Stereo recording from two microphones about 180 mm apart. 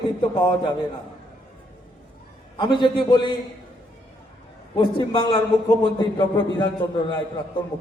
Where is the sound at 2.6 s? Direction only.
25° left (ahead or behind).